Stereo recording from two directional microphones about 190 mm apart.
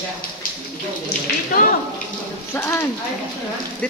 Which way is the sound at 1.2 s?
50° left (ahead or behind).